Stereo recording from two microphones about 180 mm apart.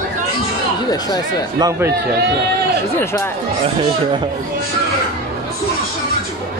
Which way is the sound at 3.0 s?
15° left (ahead or behind).